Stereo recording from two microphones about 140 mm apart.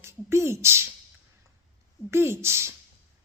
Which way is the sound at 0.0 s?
20° right (ahead or behind).